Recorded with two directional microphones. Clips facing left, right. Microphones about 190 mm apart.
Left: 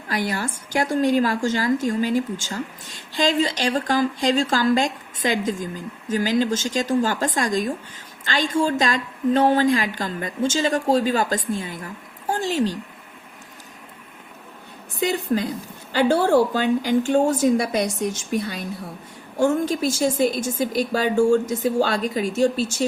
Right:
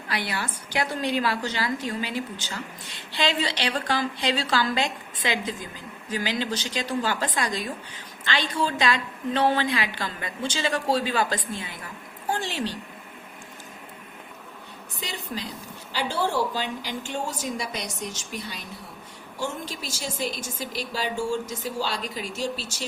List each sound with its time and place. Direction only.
0.1 s a woman's voice: 45° left (ahead or behind)
15.0 s a woman's voice: 50° left (ahead or behind)